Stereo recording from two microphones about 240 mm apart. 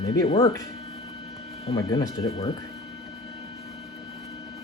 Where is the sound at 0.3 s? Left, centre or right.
Centre.